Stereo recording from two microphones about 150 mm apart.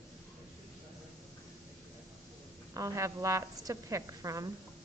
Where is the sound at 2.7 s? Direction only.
20° right (ahead or behind).